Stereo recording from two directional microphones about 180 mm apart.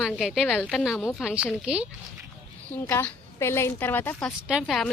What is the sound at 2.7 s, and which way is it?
A woman's voice, 10° left (ahead or behind).